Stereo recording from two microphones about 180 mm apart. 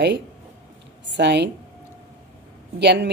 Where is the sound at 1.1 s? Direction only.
70° right (ahead or behind).